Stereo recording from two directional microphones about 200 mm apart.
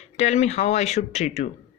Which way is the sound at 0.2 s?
35° left (ahead or behind).